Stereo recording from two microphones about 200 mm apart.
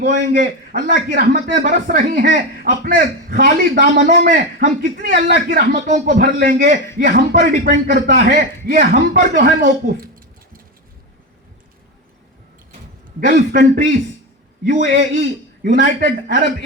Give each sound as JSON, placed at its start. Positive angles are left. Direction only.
{"t": 0.0, "sound": "a man's voice", "side_deg": -40}
{"t": 0.8, "sound": "a man's voice", "side_deg": -55}
{"t": 8.0, "sound": "a man's voice", "side_deg": -45}
{"t": 13.1, "sound": "a man's voice", "side_deg": -40}
{"t": 14.6, "sound": "a man's voice", "side_deg": -35}
{"t": 15.2, "sound": "a man's voice", "side_deg": -50}